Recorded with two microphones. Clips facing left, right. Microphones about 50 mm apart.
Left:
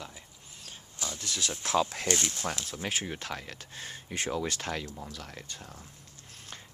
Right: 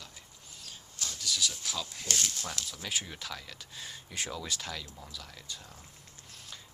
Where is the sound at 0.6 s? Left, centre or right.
Centre.